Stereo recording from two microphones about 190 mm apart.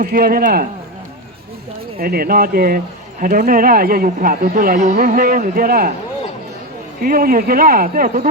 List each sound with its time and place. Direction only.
0.0 s speech: 50° right (ahead or behind)
2.0 s speech: 50° right (ahead or behind)
7.0 s speech: 50° right (ahead or behind)